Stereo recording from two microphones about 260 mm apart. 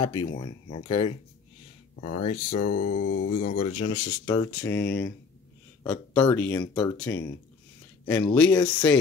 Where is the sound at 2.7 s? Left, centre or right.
Left.